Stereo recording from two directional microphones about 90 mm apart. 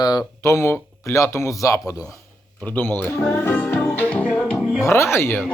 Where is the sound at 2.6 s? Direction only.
20° left (ahead or behind).